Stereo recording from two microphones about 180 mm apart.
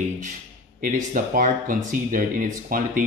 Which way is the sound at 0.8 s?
50° right (ahead or behind).